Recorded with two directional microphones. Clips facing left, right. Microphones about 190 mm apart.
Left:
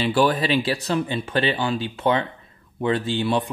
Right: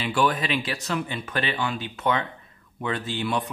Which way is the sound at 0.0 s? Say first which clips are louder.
Left 4 dB; 35° left (ahead or behind).